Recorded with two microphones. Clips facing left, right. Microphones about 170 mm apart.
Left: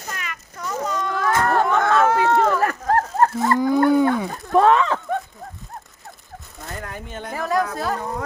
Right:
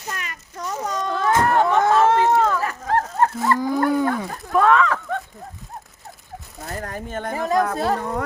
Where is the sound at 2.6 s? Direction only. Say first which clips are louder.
Left 3 dB; 45° left (ahead or behind).